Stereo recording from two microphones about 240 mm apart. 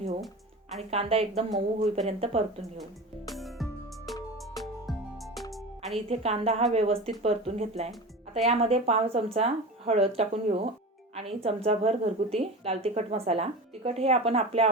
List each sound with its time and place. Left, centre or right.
0.8 s a woman's voice: right
3.2 s music: centre
6.1 s a woman's voice: right